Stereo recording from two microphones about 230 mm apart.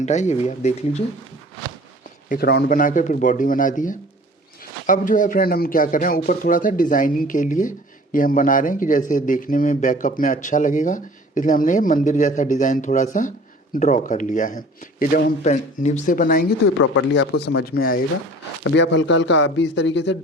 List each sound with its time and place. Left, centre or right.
0.0 s speech: left
2.3 s speech: left
16.7 s speech: left
18.6 s a man's voice: left